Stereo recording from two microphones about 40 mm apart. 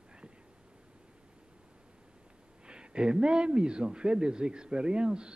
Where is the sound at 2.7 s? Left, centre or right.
Right.